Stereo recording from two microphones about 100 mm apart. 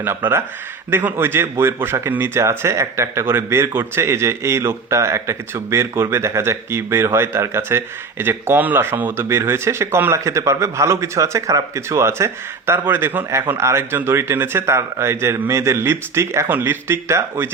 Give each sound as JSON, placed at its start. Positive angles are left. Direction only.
{"t": 0.0, "sound": "a man's voice", "side_deg": -20}